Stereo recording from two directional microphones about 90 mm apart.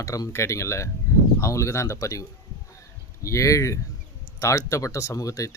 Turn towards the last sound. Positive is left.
turn(degrees=40)  # may be behind; listen again after turning